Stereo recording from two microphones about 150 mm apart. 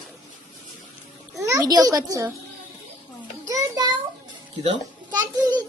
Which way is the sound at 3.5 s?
25° right (ahead or behind).